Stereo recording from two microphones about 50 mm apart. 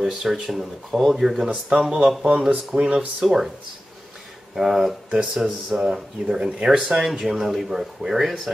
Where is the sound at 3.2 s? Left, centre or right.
Centre.